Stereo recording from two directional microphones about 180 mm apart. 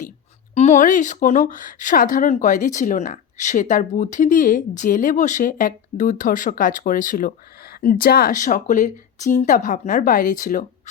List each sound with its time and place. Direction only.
0.5 s a woman's voice: 40° left (ahead or behind)